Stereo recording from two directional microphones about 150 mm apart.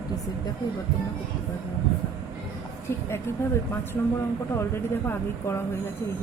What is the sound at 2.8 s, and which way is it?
Speech, 15° left (ahead or behind).